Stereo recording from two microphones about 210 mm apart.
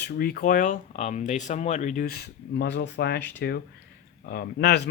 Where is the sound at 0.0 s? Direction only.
50° left (ahead or behind).